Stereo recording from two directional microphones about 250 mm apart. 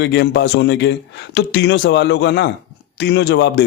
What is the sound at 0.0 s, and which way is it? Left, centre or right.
Speech, left.